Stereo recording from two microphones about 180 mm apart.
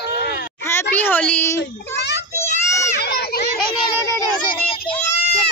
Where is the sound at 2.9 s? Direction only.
65° left (ahead or behind).